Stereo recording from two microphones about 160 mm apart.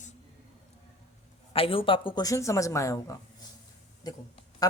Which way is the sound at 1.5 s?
35° left (ahead or behind).